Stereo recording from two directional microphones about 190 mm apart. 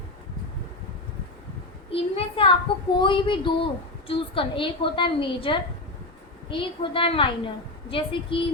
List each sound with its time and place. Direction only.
1.9 s a woman's voice: 30° left (ahead or behind)